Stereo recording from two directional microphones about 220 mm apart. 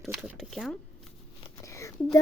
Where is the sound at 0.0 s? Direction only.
Centre (ahead or behind).